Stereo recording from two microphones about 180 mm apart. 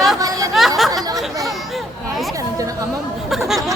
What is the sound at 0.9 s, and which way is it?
Chatter, 20° right (ahead or behind).